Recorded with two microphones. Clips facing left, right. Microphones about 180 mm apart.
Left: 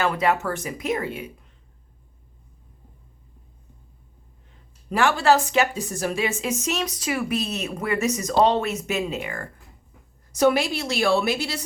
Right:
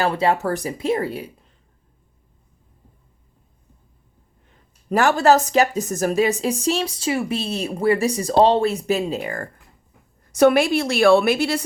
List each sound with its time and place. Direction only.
0.0 s speech: 30° right (ahead or behind)
4.9 s speech: 45° right (ahead or behind)
10.3 s a woman's voice: 60° right (ahead or behind)